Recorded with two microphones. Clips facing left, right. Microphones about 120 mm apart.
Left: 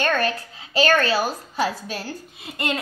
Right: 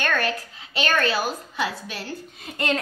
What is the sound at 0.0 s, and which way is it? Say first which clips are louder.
A woman's voice: left 3 dB; 30° left (ahead or behind).